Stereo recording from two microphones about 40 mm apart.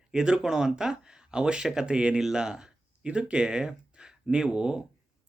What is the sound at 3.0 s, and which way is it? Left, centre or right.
Speech, right.